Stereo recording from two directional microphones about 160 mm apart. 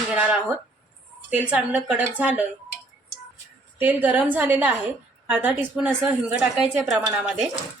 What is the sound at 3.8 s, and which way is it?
A woman's voice, 10° right (ahead or behind).